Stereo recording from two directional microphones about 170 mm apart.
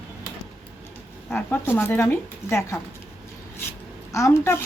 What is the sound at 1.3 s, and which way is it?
Speech, 10° left (ahead or behind).